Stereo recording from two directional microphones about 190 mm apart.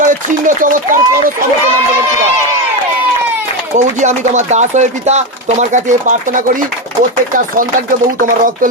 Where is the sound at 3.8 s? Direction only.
40° right (ahead or behind).